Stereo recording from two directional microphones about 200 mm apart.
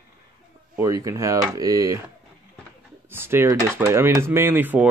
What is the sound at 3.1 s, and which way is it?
Speech, 10° right (ahead or behind).